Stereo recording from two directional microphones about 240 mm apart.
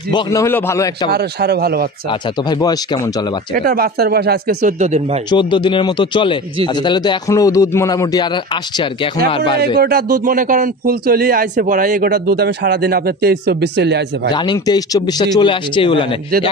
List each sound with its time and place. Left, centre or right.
0.1 s speech: centre
1.1 s a man's voice: right
2.0 s speech: centre
3.5 s a man's voice: right
5.3 s speech: centre
9.8 s a man's voice: right
14.3 s speech: centre